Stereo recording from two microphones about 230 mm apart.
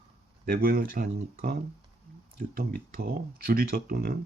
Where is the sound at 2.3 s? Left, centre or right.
Right.